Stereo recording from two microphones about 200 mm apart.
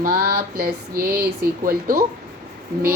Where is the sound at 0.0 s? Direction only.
50° right (ahead or behind).